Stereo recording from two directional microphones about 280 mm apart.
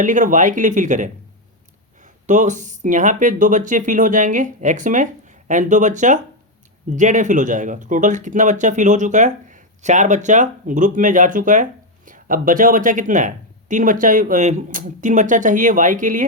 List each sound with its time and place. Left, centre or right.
0.0 s speech: right
2.2 s speech: right